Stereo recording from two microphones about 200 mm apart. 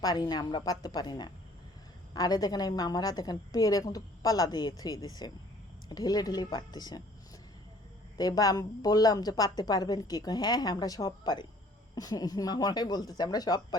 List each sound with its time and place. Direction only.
0.0 s a woman's voice: 20° left (ahead or behind)
8.2 s a woman's voice: 20° left (ahead or behind)